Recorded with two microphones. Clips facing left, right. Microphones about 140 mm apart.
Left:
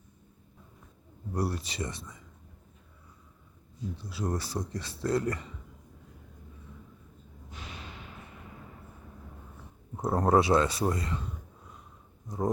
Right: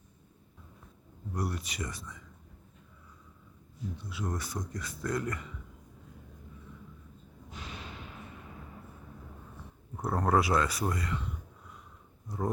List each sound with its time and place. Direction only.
1.3 s speech: 30° left (ahead or behind)
3.9 s speech: 35° left (ahead or behind)
10.0 s speech: 25° left (ahead or behind)